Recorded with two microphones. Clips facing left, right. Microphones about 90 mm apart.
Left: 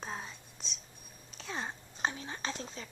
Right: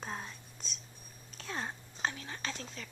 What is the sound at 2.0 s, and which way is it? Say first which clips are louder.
Whispering: left 2 dB; 20° left (ahead or behind).